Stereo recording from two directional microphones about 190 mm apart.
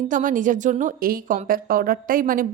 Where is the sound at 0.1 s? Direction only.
45° right (ahead or behind).